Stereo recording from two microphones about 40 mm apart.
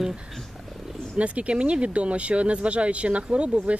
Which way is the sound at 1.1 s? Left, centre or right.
Right.